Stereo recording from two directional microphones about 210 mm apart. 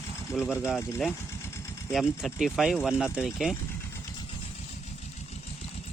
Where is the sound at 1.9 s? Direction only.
Centre (ahead or behind).